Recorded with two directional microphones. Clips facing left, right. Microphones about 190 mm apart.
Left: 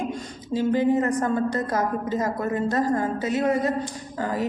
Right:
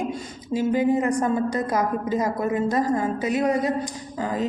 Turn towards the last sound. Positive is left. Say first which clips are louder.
# right 1 dB
turn(degrees=-15)  # may be behind; listen again after turning